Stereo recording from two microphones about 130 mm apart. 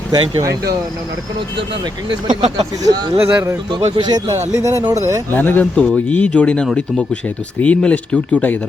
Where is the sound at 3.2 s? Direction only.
15° right (ahead or behind).